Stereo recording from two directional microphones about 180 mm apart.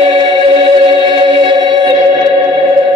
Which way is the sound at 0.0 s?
30° right (ahead or behind).